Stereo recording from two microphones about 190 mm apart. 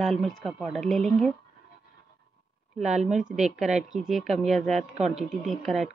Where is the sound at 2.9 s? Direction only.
35° right (ahead or behind).